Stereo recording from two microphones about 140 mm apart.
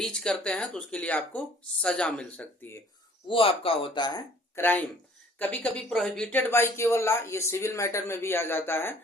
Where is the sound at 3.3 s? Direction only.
40° left (ahead or behind).